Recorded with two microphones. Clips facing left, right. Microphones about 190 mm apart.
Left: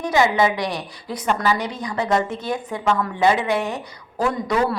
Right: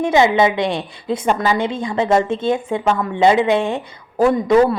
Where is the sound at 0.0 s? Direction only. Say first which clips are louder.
Right 4 dB; 20° right (ahead or behind).